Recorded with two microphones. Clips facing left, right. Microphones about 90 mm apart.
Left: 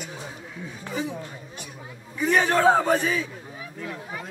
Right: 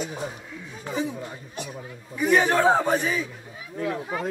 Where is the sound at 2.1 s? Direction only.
15° right (ahead or behind).